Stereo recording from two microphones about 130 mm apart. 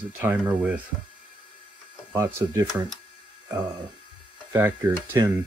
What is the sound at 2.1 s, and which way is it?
Speech, 25° right (ahead or behind).